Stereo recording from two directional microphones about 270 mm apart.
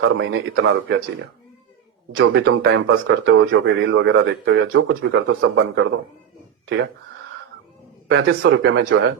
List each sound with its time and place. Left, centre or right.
0.0 s speech: right
2.1 s speech: right
8.0 s speech: right